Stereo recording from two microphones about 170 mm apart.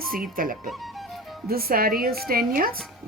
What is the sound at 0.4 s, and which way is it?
Speech, 55° right (ahead or behind).